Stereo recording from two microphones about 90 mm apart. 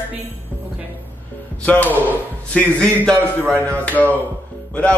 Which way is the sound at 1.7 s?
20° left (ahead or behind).